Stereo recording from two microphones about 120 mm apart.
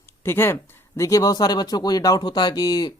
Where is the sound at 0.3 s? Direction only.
20° left (ahead or behind).